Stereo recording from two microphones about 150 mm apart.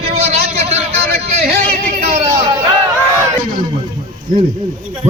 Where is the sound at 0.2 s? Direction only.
45° right (ahead or behind).